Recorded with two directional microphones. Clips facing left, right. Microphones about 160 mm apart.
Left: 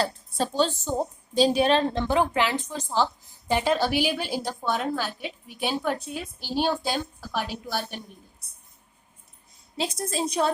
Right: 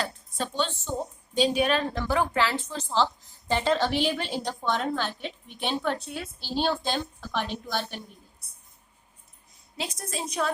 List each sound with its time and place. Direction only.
0.0 s a woman's voice: 35° left (ahead or behind); by 7.9 s 10° left (ahead or behind)
9.7 s a woman's voice: 30° left (ahead or behind)